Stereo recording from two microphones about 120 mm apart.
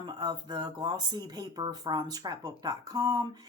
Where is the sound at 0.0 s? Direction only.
40° right (ahead or behind).